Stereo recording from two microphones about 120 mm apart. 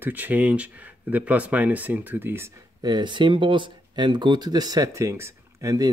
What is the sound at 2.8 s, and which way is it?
Speech, 35° right (ahead or behind).